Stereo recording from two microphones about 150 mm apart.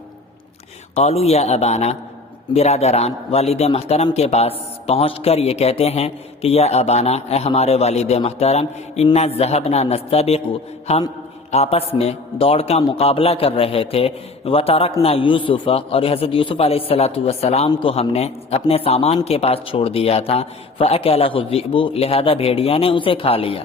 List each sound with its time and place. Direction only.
0.9 s a man's voice: 45° left (ahead or behind)